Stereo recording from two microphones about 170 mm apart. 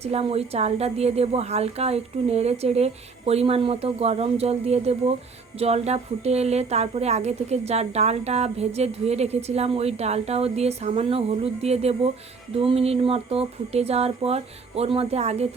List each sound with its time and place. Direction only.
0.0 s a woman's voice: 35° right (ahead or behind)